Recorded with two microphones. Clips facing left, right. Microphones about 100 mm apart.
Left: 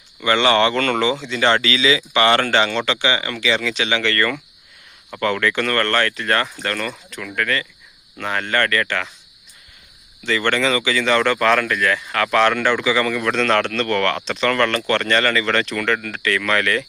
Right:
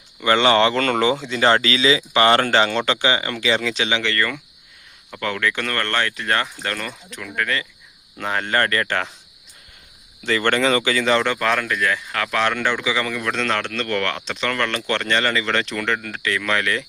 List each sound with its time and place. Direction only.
0.3 s speech: 30° right (ahead or behind)
3.8 s speech: 15° right (ahead or behind); by 9.1 s 30° right (ahead or behind)
10.2 s speech: 40° right (ahead or behind)
11.2 s speech: 10° right (ahead or behind)